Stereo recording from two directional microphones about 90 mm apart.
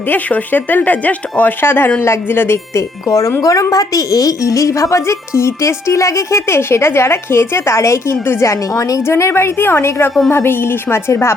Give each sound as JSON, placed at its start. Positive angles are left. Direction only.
{"t": 0.1, "sound": "speech", "side_deg": 20}
{"t": 3.1, "sound": "a woman's voice", "side_deg": 40}